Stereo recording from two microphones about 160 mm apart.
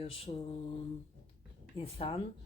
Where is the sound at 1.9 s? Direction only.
35° left (ahead or behind).